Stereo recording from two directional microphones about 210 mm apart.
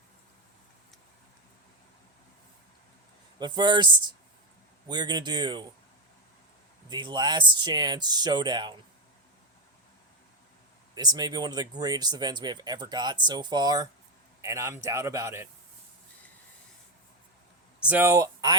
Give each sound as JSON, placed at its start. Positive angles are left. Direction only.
{"t": 3.3, "sound": "speech", "side_deg": -20}
{"t": 6.8, "sound": "speech", "side_deg": -20}
{"t": 10.9, "sound": "speech", "side_deg": -20}
{"t": 17.7, "sound": "speech", "side_deg": -5}